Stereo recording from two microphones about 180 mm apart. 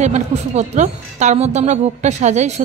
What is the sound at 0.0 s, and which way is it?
Speech, 40° right (ahead or behind).